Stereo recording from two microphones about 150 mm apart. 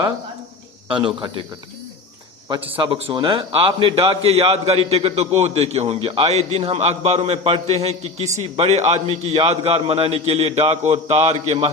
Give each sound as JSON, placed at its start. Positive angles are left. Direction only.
{"t": 0.9, "sound": "a man's voice", "side_deg": -35}
{"t": 2.5, "sound": "a man's voice", "side_deg": -35}